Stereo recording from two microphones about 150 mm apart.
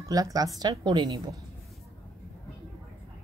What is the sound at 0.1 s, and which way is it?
Speech, 25° right (ahead or behind).